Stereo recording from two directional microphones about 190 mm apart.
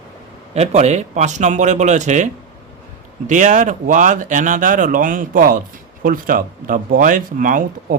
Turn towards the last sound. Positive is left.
turn(degrees=-45)  # may be behind; listen again after turning